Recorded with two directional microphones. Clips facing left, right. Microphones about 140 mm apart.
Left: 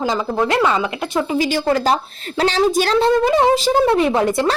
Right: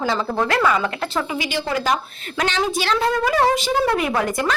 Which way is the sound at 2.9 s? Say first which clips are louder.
Left 4 dB; 30° left (ahead or behind).